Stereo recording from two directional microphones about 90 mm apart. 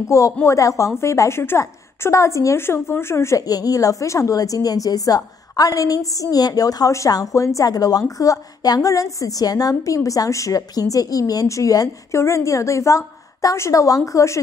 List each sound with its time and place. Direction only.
0.1 s a woman's voice: 35° left (ahead or behind)
3.4 s a woman's voice: 45° left (ahead or behind)